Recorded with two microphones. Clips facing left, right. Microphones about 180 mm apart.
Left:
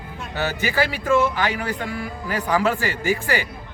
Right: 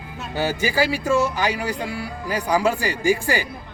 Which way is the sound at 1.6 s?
10° right (ahead or behind).